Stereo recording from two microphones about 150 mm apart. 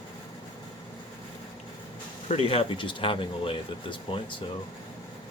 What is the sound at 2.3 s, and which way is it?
Speech, 40° left (ahead or behind).